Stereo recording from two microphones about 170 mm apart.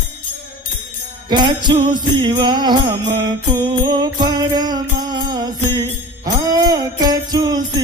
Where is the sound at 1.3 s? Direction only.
25° right (ahead or behind).